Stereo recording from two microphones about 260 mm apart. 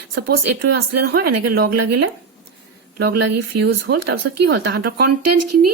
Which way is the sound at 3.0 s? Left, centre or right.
Right.